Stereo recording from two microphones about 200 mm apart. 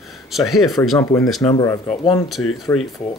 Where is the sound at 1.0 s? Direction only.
15° left (ahead or behind).